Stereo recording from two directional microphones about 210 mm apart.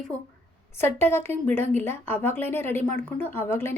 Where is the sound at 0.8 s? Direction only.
10° left (ahead or behind).